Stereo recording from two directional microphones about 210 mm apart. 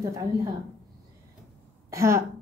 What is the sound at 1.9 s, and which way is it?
Speech, 15° right (ahead or behind).